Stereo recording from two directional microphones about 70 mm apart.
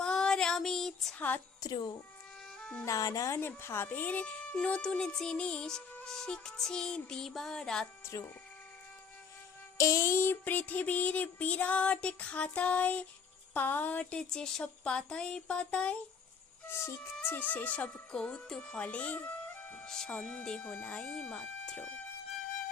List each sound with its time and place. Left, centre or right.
0.0 s female singing: centre
1.6 s speech: left
2.8 s speech: left
3.4 s speech: left; by 7.9 s centre
9.7 s a sound: left
13.5 s speech: left
16.6 s music: left
17.3 s a sound: left
19.6 s music: left
20.1 s speech: centre
20.7 s a sound: left